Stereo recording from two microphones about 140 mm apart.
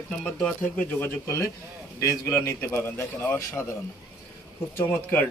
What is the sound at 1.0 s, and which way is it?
A man's voice, 20° left (ahead or behind).